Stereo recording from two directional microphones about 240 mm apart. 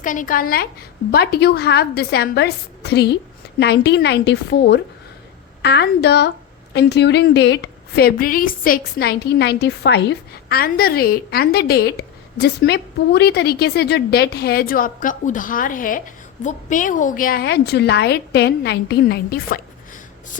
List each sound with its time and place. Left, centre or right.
0.0 s a woman's voice: left